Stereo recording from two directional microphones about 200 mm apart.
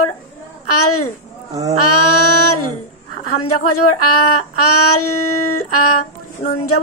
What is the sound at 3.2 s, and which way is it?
Speech, 90° left.